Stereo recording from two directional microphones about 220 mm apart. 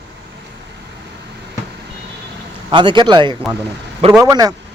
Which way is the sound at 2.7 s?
20° right (ahead or behind).